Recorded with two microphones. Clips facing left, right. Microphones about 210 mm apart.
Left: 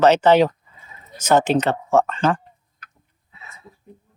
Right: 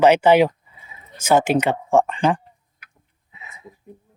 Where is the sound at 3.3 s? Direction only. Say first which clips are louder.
Right 2 dB; 15° right (ahead or behind).